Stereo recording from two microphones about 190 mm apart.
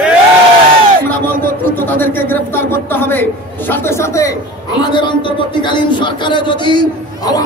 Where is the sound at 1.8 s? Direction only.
10° left (ahead or behind).